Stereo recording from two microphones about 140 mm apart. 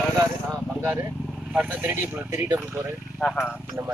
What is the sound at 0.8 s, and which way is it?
Vehicle, 25° right (ahead or behind).